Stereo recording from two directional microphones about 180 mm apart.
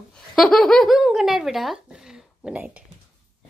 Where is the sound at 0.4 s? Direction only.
5° left (ahead or behind).